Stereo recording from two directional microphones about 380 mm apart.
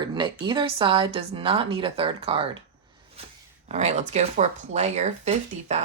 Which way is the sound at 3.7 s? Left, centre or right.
Centre.